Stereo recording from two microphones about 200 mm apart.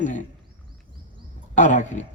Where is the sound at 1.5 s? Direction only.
35° left (ahead or behind).